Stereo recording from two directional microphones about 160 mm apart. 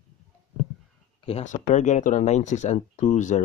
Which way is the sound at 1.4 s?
50° left (ahead or behind).